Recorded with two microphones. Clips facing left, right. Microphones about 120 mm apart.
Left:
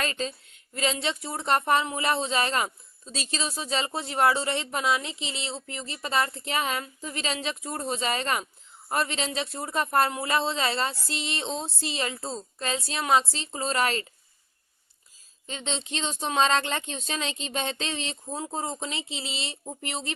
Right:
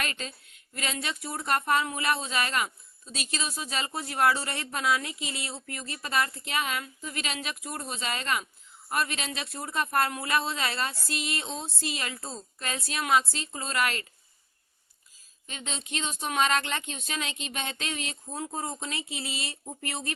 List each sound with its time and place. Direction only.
0.0 s speech: 30° left (ahead or behind)
15.4 s speech: 30° left (ahead or behind)